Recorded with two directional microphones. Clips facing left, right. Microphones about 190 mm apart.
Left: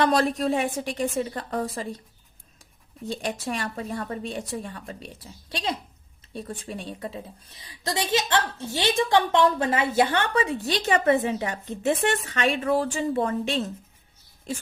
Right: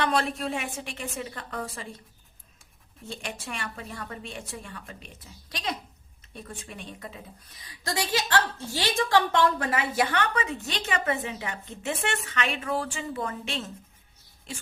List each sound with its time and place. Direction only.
0.0 s a woman's voice: 35° left (ahead or behind)
3.0 s a woman's voice: 35° left (ahead or behind)